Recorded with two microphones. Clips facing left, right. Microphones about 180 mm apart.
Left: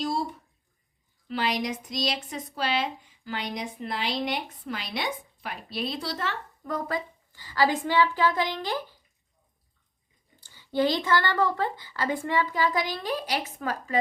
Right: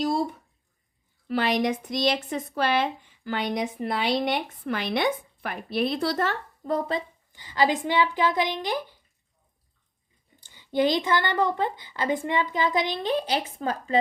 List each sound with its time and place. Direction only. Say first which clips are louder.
1.3 s speech: right 5 dB; 55° right (ahead or behind)
6.7 s a woman's voice: right 4 dB; 25° right (ahead or behind)
10.4 s a woman's voice: right 2 dB; 20° right (ahead or behind)